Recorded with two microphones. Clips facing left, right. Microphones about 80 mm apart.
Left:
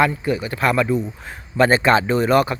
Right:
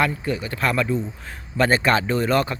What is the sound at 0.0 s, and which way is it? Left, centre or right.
Speech, centre.